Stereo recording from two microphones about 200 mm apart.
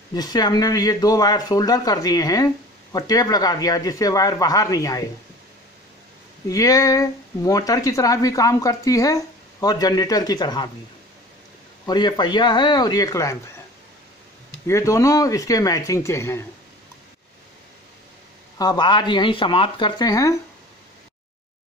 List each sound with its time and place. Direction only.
0.1 s speech: 20° left (ahead or behind)
6.4 s speech: 15° left (ahead or behind)
11.8 s speech: 20° left (ahead or behind)
14.7 s speech: 15° left (ahead or behind)
18.6 s speech: 20° left (ahead or behind)